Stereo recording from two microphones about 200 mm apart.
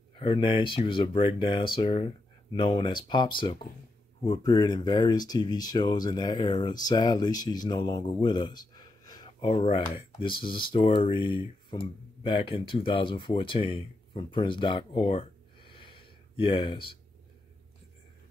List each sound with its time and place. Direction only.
0.1 s speech: 25° left (ahead or behind)